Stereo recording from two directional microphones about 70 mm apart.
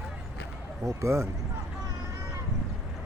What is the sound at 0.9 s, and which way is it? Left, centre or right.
Speech, right.